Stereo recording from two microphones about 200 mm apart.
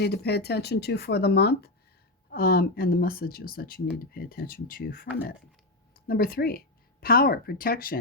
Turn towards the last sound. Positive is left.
turn(degrees=45)  # may be behind; listen again after turning